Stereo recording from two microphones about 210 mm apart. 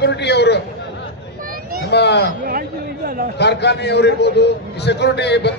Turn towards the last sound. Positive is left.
turn(degrees=55)  # may be behind; listen again after turning